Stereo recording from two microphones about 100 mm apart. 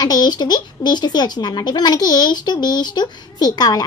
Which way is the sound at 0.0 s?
45° left (ahead or behind).